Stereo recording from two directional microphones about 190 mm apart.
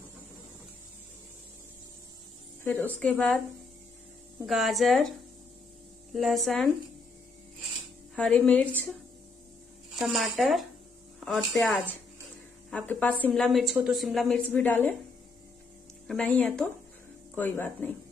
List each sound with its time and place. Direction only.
2.6 s speech: 10° left (ahead or behind)
4.5 s a woman's voice: centre (ahead or behind)
6.1 s a woman's voice: centre (ahead or behind)
8.4 s a woman's voice: 5° left (ahead or behind)
9.9 s a woman's voice: centre (ahead or behind)
11.1 s music: centre (ahead or behind)
12.6 s a woman's voice: 5° left (ahead or behind)
16.1 s a woman's voice: 5° left (ahead or behind)